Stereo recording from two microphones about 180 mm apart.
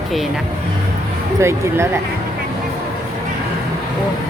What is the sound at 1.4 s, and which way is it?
Speech, 15° right (ahead or behind).